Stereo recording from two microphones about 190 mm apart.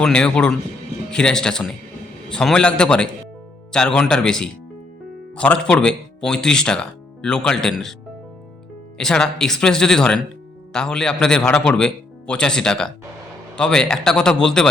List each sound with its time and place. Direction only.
0.0 s speech: 5° left (ahead or behind)
9.0 s speech: 5° left (ahead or behind)